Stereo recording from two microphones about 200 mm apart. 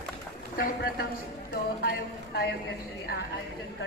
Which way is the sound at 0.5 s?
50° left (ahead or behind).